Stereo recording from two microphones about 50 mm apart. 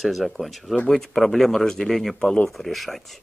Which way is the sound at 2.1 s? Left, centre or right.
Centre.